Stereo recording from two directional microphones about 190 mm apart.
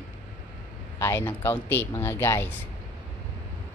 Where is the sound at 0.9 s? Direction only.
15° left (ahead or behind).